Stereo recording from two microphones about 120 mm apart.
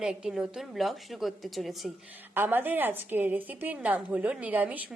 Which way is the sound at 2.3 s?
15° right (ahead or behind).